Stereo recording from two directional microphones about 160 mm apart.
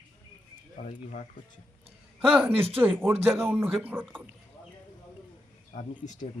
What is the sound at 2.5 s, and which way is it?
Speech, 35° right (ahead or behind).